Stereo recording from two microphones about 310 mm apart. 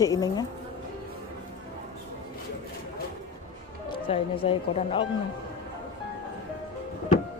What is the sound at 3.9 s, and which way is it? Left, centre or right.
Speech, centre.